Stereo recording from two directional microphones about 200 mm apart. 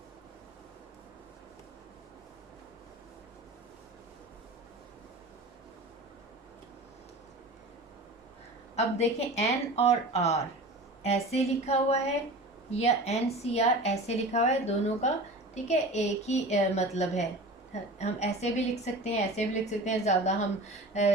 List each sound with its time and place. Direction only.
8.7 s a woman's voice: 30° left (ahead or behind)